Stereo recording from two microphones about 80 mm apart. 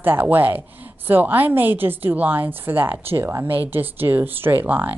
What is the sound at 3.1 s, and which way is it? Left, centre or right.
Speech, right.